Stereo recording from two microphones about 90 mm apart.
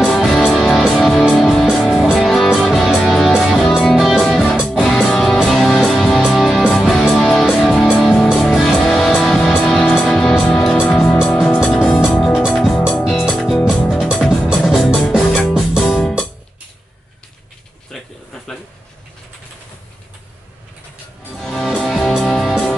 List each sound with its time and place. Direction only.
0.0 s music: centre (ahead or behind)
4.2 s music: 5° left (ahead or behind)
11.4 s music: 5° left (ahead or behind)
11.7 s music: 15° left (ahead or behind)
13.0 s music: 5° right (ahead or behind)
16.0 s music: 5° left (ahead or behind)
17.9 s a sound: 5° left (ahead or behind)
21.4 s music: 5° left (ahead or behind)